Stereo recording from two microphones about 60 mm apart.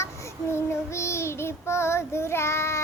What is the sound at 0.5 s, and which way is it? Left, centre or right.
Child singing, left.